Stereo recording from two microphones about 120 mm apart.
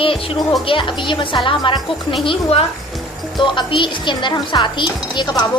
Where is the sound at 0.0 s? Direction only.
50° left (ahead or behind).